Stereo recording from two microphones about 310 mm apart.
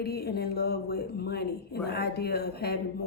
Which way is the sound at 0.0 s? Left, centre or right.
Left.